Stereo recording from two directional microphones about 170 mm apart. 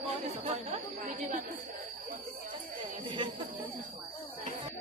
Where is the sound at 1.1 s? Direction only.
50° right (ahead or behind).